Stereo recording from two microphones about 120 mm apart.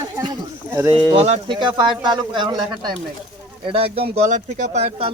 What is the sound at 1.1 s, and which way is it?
Speech, 60° right (ahead or behind).